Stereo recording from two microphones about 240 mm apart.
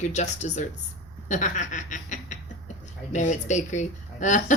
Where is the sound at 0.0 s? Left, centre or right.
Left.